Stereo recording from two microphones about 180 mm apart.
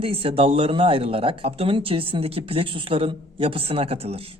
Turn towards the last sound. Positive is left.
turn(degrees=-35)  # may be behind; listen again after turning